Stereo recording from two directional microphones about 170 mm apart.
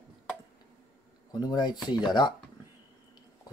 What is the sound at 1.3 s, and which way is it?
Speech, 25° left (ahead or behind).